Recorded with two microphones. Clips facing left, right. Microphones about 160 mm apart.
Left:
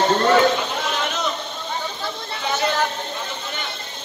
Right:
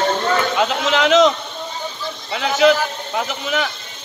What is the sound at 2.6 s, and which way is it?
Speech, 90° right.